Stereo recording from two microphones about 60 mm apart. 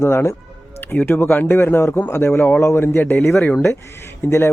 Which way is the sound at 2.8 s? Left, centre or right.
Left.